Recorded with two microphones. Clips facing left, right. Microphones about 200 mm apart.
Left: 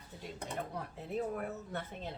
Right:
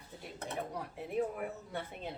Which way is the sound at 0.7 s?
10° right (ahead or behind).